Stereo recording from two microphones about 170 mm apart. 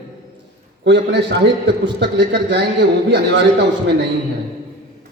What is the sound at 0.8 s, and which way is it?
A man's voice, 90° right.